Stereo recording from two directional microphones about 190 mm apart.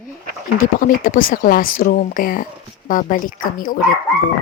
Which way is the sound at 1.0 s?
45° left (ahead or behind).